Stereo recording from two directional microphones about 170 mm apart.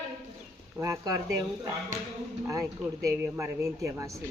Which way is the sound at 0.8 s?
20° right (ahead or behind).